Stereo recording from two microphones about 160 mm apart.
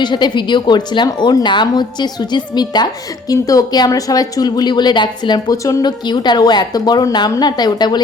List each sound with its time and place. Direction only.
0.0 s a woman's voice: 30° left (ahead or behind)